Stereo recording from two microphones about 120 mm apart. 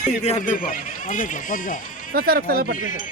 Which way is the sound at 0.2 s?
65° left (ahead or behind).